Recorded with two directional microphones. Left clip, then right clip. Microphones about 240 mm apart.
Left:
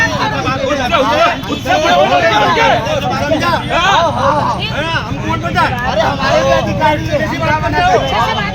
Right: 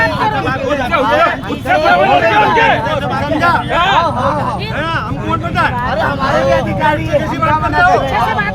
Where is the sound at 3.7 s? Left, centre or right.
Centre.